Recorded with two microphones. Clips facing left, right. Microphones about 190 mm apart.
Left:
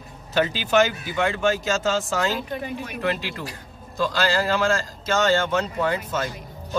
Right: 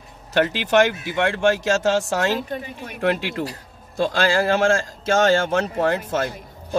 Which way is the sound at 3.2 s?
70° right (ahead or behind).